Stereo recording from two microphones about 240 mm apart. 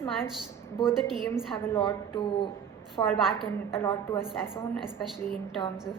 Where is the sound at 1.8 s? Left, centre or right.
Left.